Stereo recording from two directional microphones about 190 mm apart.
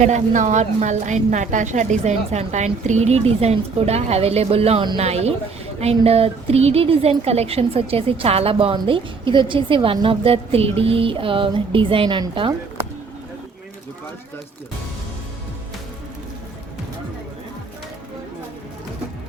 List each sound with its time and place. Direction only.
0.0 s a woman's voice: 40° right (ahead or behind)